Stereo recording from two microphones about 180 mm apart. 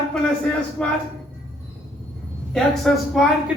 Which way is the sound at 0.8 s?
5° left (ahead or behind).